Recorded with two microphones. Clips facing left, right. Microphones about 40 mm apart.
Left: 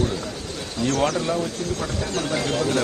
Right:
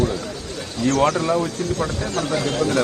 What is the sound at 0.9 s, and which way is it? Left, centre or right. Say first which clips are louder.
A man's voice: right 4 dB; right.